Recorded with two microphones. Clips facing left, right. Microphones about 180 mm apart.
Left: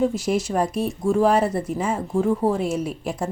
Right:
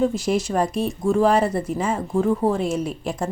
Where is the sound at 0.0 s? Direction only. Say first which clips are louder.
Right 1 dB; 5° left (ahead or behind).